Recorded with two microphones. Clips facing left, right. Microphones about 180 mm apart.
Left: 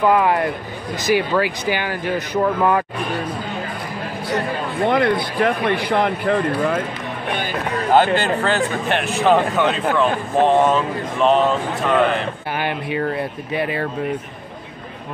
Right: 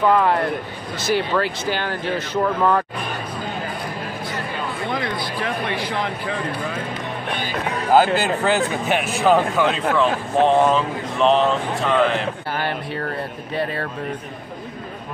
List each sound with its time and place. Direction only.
0.0 s speech: 10° left (ahead or behind)
4.8 s speech: 60° left (ahead or behind)
7.9 s speech: 5° right (ahead or behind)
12.5 s speech: 15° left (ahead or behind)